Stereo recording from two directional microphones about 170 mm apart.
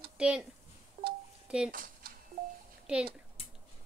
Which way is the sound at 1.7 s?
55° right (ahead or behind).